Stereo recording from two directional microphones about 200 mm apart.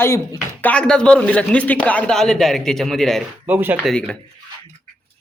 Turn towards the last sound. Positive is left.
turn(degrees=-10)  # may be behind; listen again after turning